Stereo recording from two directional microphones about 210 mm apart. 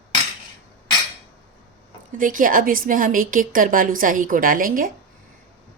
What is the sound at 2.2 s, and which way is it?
A woman's voice, 40° right (ahead or behind).